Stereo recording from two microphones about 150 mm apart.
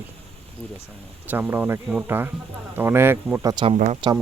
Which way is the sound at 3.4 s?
35° right (ahead or behind).